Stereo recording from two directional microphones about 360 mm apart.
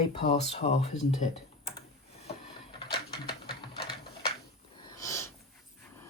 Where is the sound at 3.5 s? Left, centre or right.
Left.